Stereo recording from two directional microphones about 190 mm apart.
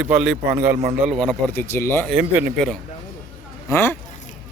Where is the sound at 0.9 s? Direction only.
5° right (ahead or behind).